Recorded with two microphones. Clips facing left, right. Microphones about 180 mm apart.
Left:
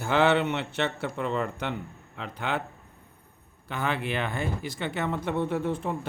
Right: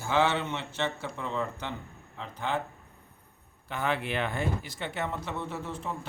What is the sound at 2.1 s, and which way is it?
Speech, 75° left (ahead or behind).